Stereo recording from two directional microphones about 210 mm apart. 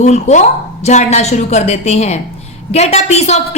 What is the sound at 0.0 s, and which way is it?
A woman's voice, 35° left (ahead or behind).